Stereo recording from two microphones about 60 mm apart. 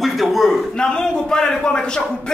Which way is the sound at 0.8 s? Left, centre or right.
Centre.